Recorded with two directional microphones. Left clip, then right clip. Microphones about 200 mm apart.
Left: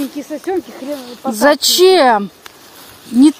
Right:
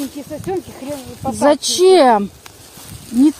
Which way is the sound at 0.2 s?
40° left (ahead or behind).